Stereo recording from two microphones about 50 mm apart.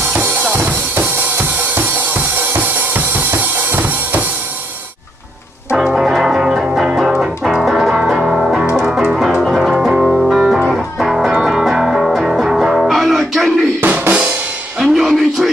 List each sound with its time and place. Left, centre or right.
0.0 s drum kit: right
5.9 s music: centre
13.8 s drum kit: right
14.8 s music: centre